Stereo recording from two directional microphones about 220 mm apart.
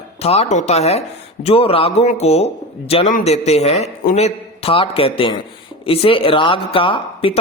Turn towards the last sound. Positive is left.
turn(degrees=25)  # may be behind; listen again after turning